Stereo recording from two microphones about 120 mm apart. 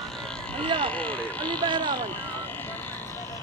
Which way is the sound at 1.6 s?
40° right (ahead or behind).